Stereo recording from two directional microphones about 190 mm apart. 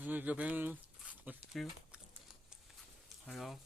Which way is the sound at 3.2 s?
Centre (ahead or behind).